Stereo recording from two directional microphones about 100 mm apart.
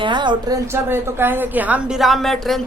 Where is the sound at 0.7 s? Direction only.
20° right (ahead or behind).